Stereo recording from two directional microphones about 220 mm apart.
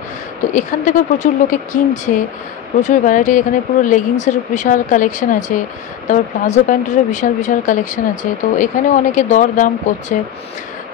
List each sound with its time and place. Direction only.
0.6 s speech: 35° left (ahead or behind)